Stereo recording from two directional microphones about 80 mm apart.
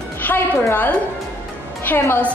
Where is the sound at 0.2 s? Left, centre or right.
Left.